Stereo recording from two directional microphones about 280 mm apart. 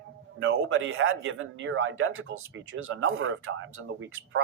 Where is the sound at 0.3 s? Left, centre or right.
Right.